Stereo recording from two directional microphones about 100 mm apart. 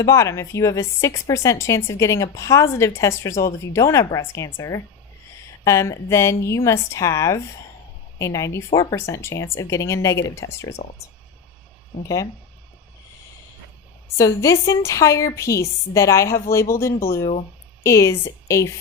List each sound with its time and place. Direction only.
0.0 s a woman's voice: 30° left (ahead or behind)
12.0 s a woman's voice: 35° left (ahead or behind)
14.2 s a woman's voice: 30° left (ahead or behind)